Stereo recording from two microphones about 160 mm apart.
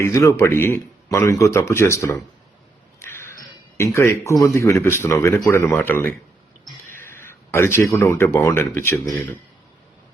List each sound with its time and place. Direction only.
0.0 s speech: 20° left (ahead or behind)
3.0 s a sound: 15° left (ahead or behind)
3.8 s speech: 15° left (ahead or behind)